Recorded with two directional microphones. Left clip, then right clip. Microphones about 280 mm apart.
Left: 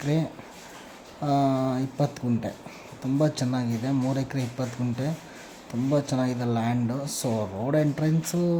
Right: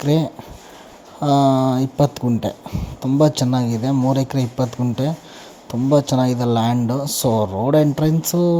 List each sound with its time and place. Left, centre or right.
0.0 s speech: right